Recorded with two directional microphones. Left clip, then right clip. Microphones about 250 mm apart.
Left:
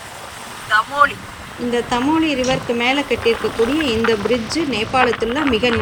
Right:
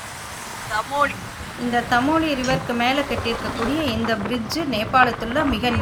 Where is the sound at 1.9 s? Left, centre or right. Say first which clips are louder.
Left 1 dB; centre.